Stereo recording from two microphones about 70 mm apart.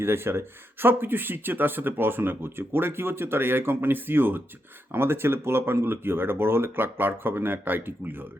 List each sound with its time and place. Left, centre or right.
0.0 s speech: right